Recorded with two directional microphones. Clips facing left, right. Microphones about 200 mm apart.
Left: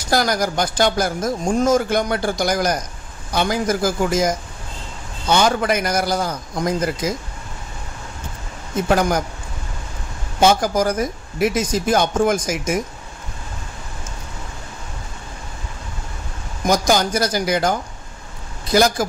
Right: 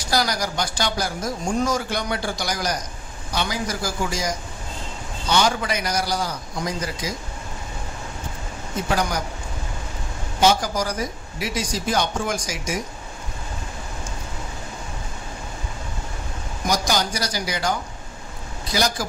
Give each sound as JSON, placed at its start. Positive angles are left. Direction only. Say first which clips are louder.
{"t": 0.1, "sound": "speech", "louder": "left 5 dB", "side_deg": 50}
{"t": 8.8, "sound": "speech", "louder": "left 6 dB", "side_deg": 50}
{"t": 10.4, "sound": "speech", "louder": "left 4 dB", "side_deg": 50}
{"t": 16.6, "sound": "speech", "louder": "left 6 dB", "side_deg": 50}